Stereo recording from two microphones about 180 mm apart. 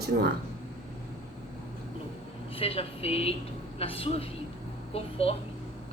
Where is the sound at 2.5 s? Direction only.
35° left (ahead or behind).